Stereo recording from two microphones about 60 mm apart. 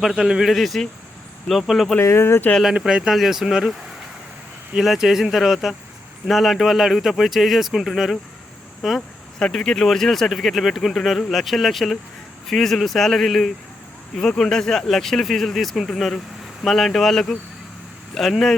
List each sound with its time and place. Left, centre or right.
0.0 s speech: centre
2.0 s speech: left
2.7 s speech: centre
4.8 s speech: centre